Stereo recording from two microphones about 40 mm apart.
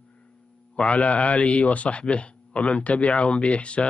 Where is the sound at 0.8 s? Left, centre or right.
Left.